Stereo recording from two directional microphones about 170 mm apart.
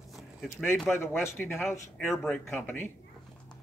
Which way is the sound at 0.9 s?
15° left (ahead or behind).